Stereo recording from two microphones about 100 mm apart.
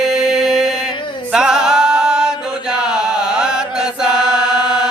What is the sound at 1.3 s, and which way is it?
A capella, 5° right (ahead or behind).